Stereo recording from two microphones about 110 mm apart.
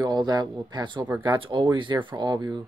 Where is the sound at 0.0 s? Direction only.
40° right (ahead or behind).